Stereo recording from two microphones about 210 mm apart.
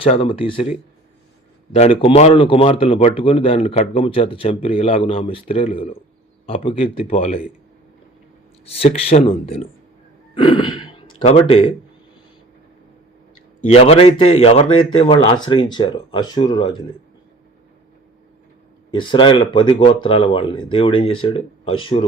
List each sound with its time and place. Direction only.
0.0 s a man's voice: 25° left (ahead or behind)
8.6 s a man's voice: 30° left (ahead or behind)
10.3 s sigh: 25° left (ahead or behind)
11.2 s a man's voice: 30° left (ahead or behind)
13.7 s a man's voice: 30° left (ahead or behind)
18.9 s a man's voice: 25° left (ahead or behind)